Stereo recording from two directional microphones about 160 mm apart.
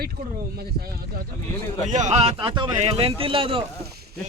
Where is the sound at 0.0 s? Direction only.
70° right (ahead or behind).